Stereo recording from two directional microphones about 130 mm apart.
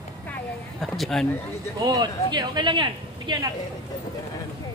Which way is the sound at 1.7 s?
30° right (ahead or behind).